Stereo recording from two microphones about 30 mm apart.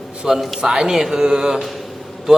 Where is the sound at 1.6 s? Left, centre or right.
Centre.